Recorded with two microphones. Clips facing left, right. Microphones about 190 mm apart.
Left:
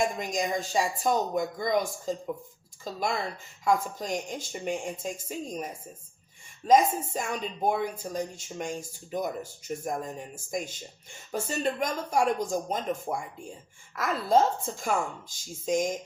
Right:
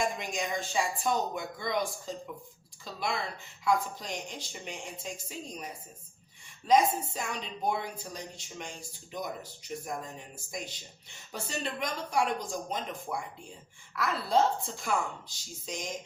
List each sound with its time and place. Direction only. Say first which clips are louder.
0.0 s speech: left 4 dB; 40° left (ahead or behind)
6.7 s speech: left 3 dB; 45° left (ahead or behind)